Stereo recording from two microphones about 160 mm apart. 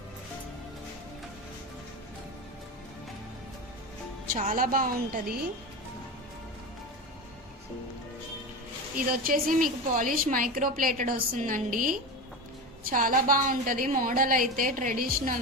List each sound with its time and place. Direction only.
4.3 s a woman's voice: 55° right (ahead or behind)
9.0 s a woman's voice: 60° right (ahead or behind)